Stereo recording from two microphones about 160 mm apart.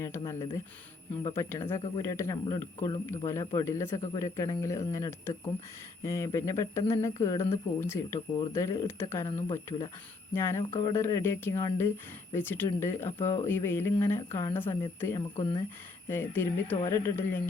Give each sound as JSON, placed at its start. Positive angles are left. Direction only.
{"t": 0.0, "sound": "speech", "side_deg": 15}